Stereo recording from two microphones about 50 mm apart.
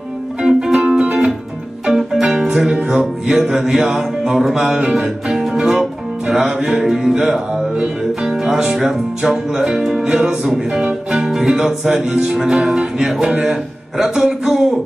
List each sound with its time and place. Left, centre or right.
0.4 s music: centre
2.7 s music: centre
3.3 s music: centre
5.3 s music: centre
13.1 s speech: centre